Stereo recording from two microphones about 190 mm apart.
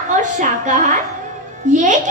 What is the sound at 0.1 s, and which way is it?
A woman's voice, 40° right (ahead or behind).